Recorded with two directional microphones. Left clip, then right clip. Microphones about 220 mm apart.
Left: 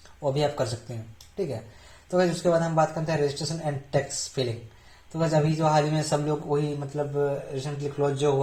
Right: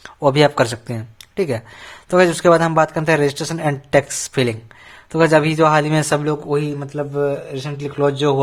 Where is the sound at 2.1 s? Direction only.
40° right (ahead or behind).